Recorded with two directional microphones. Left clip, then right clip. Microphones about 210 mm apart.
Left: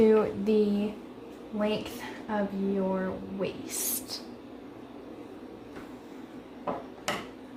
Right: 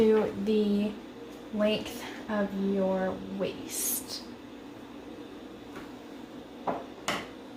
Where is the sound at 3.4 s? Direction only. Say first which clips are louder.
Left 1 dB; 25° left (ahead or behind).